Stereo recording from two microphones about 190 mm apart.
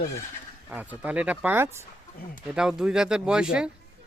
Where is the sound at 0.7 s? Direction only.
10° right (ahead or behind).